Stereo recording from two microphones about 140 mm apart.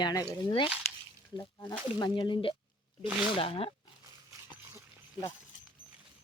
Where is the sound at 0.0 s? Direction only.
25° left (ahead or behind).